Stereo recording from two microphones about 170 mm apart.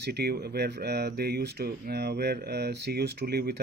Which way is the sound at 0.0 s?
75° right (ahead or behind).